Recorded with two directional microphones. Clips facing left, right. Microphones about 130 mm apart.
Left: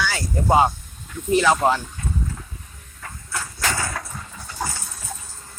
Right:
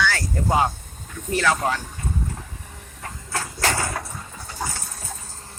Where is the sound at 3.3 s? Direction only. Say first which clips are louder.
Right 2 dB; 30° right (ahead or behind).